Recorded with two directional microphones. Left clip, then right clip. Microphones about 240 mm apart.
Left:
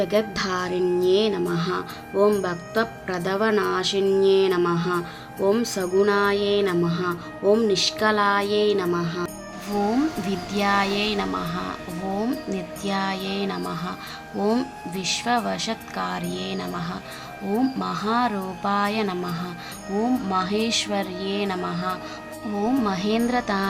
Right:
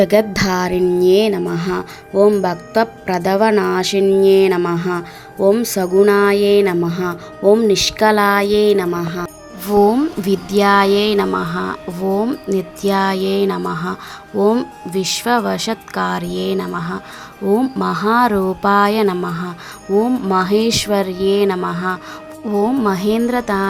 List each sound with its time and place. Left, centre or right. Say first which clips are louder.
0.0 s speech: right 9 dB; right